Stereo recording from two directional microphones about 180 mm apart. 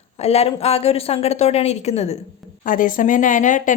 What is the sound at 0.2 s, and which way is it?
Speech, 35° left (ahead or behind).